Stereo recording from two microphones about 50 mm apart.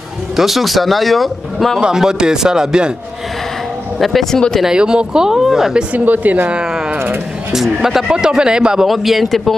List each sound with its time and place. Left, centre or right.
0.4 s speech: centre
1.8 s speech: centre
4.0 s speech: centre
4.6 s speech: centre
5.9 s speech: right
6.5 s a sound: centre
7.5 s speech: centre
8.8 s speech: centre